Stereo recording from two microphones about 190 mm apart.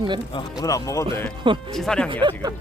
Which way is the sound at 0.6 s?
15° left (ahead or behind).